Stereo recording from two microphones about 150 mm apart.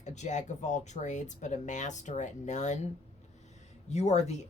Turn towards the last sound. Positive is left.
turn(degrees=50)  # may be behind; listen again after turning